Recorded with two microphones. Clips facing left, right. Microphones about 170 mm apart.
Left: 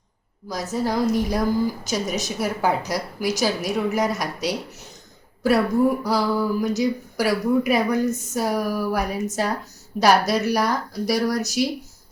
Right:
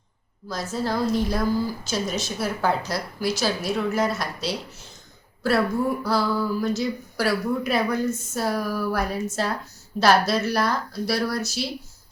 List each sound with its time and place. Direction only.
0.4 s speech: 15° left (ahead or behind)
6.0 s speech: 15° left (ahead or behind)